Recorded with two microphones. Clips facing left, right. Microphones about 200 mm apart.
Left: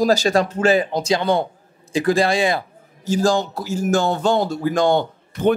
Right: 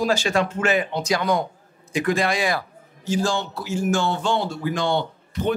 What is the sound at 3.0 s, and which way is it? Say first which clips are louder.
Speech: left 5 dB; 40° left (ahead or behind).